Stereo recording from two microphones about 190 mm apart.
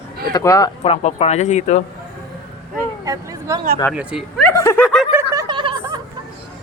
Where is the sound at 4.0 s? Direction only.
Centre (ahead or behind).